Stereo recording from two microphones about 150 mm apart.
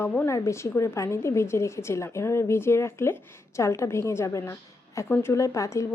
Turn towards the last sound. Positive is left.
turn(degrees=20)  # may be behind; listen again after turning